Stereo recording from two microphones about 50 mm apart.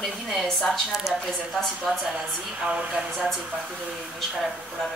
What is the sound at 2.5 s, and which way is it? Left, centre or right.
Speech, right.